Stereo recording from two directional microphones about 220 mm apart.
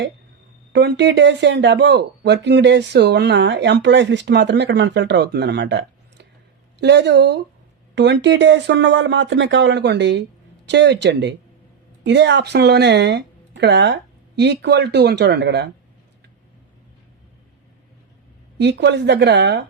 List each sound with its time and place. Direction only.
0.7 s speech: 50° right (ahead or behind)
18.5 s speech: 50° right (ahead or behind)